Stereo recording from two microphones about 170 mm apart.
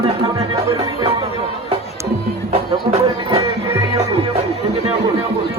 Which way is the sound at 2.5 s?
35° right (ahead or behind).